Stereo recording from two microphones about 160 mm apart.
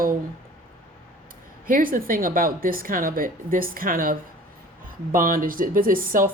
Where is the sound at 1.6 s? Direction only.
60° right (ahead or behind).